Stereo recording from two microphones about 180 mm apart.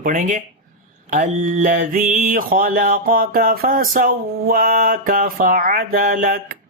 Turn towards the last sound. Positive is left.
turn(degrees=-50)  # may be behind; listen again after turning